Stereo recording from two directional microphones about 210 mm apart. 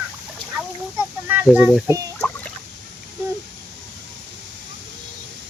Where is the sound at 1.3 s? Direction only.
5° right (ahead or behind).